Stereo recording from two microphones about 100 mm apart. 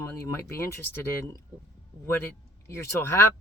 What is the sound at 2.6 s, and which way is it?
Speech, 25° left (ahead or behind).